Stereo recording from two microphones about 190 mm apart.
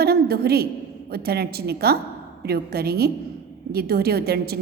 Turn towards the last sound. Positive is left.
turn(degrees=-55)  # may be behind; listen again after turning